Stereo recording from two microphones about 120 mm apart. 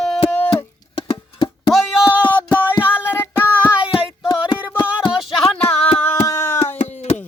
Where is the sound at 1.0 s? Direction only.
40° left (ahead or behind).